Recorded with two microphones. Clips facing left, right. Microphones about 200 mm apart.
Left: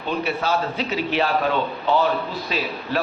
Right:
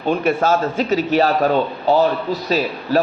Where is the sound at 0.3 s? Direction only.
45° right (ahead or behind).